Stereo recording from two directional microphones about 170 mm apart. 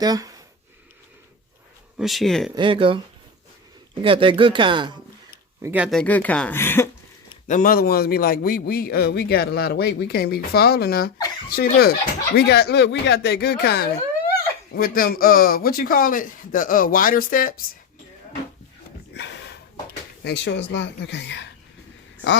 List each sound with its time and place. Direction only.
0.0 s speech: 20° right (ahead or behind)
2.0 s speech: centre (ahead or behind)
2.6 s speech: 30° right (ahead or behind)
4.0 s speech: 30° right (ahead or behind)
5.6 s speech: 5° right (ahead or behind)
6.0 s speech: 10° left (ahead or behind)
7.4 s a man's voice: 50° left (ahead or behind)
12.4 s a man's voice: 75° left (ahead or behind); by 17.5 s 55° left (ahead or behind)
19.1 s snort: 85° left
20.2 s speech: 90° left